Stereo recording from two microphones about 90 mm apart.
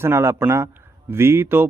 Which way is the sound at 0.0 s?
30° right (ahead or behind).